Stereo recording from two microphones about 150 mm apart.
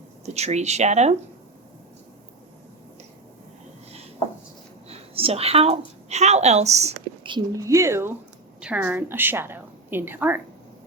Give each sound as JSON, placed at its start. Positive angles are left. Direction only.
{"t": 0.3, "sound": "speech", "side_deg": -45}
{"t": 4.9, "sound": "a woman's voice", "side_deg": -40}
{"t": 7.5, "sound": "a woman's voice", "side_deg": -20}